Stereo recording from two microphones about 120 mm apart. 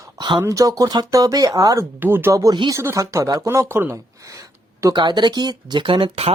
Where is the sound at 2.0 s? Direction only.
20° right (ahead or behind).